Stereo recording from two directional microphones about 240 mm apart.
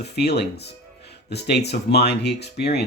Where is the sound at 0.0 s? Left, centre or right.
Left.